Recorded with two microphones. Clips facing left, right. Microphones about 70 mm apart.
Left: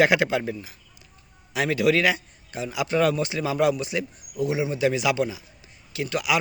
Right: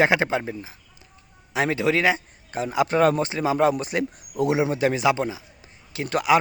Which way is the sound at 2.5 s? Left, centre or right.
Right.